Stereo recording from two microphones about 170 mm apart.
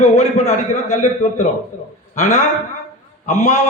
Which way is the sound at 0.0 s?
40° left (ahead or behind).